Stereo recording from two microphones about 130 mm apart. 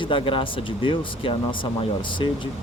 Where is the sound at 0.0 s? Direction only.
40° left (ahead or behind).